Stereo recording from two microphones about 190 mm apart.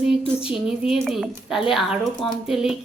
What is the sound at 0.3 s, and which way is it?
A woman's voice, 5° right (ahead or behind).